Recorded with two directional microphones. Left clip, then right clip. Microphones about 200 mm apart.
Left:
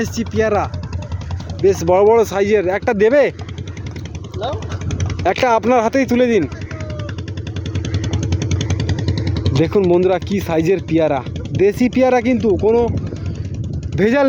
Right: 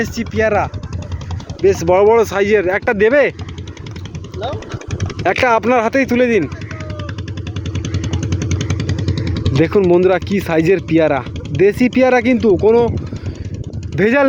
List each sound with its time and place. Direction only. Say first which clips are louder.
0.0 s speech: right 2 dB; centre (ahead or behind)
4.9 s vehicle: left 1 dB; 50° right (ahead or behind)
5.2 s speech: right 1 dB; centre (ahead or behind)
7.7 s vehicle: even; 50° right (ahead or behind)
9.0 s vehicle: right 1 dB; 15° left (ahead or behind)
9.9 s speech: right 2 dB; 5° right (ahead or behind)
13.9 s speech: right 2 dB; 5° left (ahead or behind)